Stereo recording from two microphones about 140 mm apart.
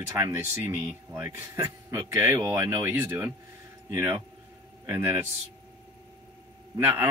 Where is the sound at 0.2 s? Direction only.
15° right (ahead or behind).